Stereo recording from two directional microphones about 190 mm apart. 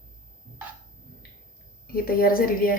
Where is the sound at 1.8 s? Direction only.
50° left (ahead or behind).